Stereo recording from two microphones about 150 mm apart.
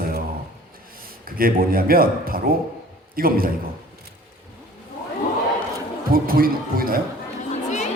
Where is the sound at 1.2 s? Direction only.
75° right (ahead or behind).